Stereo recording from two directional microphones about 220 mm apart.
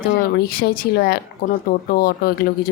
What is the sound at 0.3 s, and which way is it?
Speech, 45° left (ahead or behind).